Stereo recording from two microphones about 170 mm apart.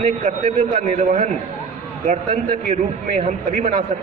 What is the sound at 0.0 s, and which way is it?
Speech, 50° right (ahead or behind).